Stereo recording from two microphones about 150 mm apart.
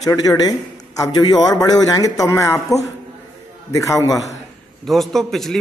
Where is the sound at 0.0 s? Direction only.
25° left (ahead or behind).